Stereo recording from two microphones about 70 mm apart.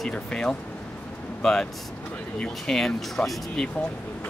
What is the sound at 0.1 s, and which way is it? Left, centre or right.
Speech, centre.